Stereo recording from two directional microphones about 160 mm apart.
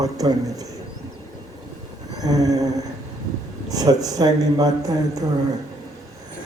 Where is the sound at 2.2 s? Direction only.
25° right (ahead or behind).